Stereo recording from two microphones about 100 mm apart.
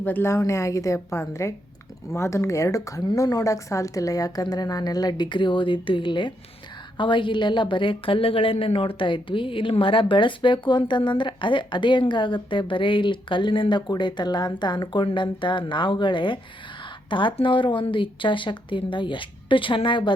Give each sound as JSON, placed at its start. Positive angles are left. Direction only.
{"t": 0.0, "sound": "a woman's voice", "side_deg": 20}